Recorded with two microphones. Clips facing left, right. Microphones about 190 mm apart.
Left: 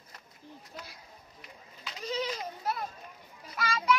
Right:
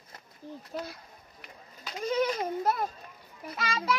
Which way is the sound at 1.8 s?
50° right (ahead or behind).